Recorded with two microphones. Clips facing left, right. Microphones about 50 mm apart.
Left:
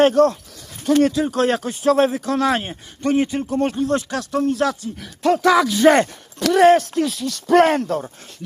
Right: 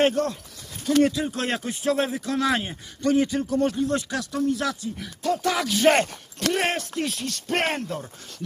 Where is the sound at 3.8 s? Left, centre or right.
Left.